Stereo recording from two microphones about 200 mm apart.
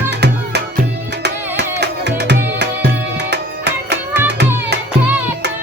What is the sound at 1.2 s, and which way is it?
Music, 55° right (ahead or behind).